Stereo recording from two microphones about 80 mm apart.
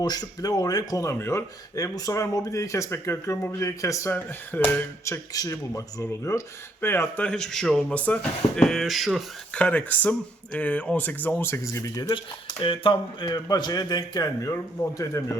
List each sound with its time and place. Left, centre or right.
0.0 s speech: left
1.2 s speech: left
1.7 s speech: left
4.1 s speech: left
5.3 s speech: left
6.8 s speech: left
7.3 s a man's voice: centre
7.9 s speech: centre
9.5 s speech: centre; by 12.1 s left
12.1 s speech: left
13.5 s speech: left